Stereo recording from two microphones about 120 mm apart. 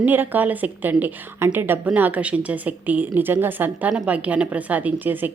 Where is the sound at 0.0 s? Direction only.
15° right (ahead or behind).